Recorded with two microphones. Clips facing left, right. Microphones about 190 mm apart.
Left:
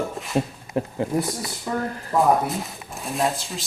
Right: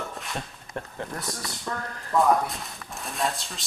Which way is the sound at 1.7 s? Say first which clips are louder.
Left 7 dB; 20° left (ahead or behind).